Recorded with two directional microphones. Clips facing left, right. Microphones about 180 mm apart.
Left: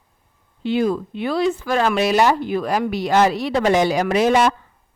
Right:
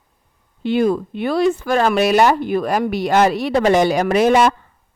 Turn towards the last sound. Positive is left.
turn(degrees=-55)  # may be behind; listen again after turning